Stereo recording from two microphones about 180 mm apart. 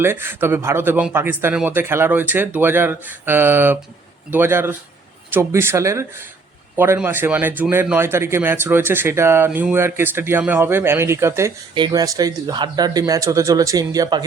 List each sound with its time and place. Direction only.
0.0 s speech: 15° right (ahead or behind)